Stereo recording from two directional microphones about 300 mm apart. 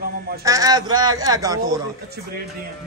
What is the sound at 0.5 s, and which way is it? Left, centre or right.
A man's voice, centre.